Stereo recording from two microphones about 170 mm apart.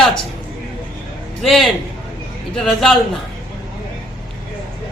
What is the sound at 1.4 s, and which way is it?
A man's voice, centre (ahead or behind).